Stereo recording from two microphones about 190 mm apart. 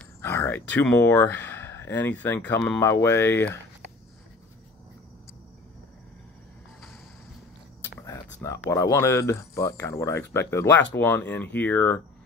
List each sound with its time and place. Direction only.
0.0 s speech: 10° left (ahead or behind)
8.0 s a sound: 15° left (ahead or behind)
8.6 s speech: 15° left (ahead or behind)